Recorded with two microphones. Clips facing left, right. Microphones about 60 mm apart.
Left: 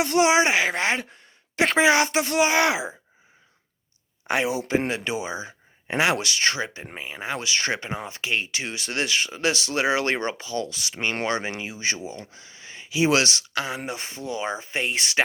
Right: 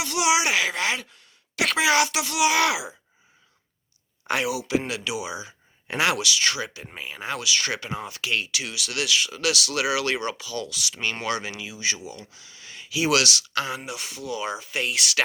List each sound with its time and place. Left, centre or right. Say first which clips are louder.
0.0 s speech: left 4 dB; left
4.3 s speech: left 1 dB; left
5.9 s speech: left 1 dB; centre
6.1 s speech: left 1 dB; left
6.9 s speech: right 2 dB; centre
7.3 s speech: left 1 dB; left
13.5 s speech: even; centre
13.7 s speech: left 2 dB; left